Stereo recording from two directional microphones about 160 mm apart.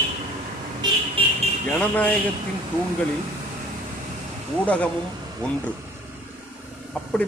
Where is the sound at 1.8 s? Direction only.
10° left (ahead or behind).